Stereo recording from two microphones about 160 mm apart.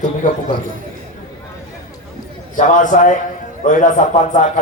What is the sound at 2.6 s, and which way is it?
A man's voice, 50° left (ahead or behind).